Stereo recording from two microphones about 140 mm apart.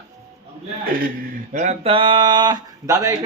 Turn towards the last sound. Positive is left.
turn(degrees=-25)  # may be behind; listen again after turning